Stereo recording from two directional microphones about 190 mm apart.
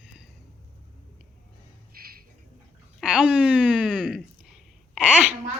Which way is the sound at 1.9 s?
50° right (ahead or behind).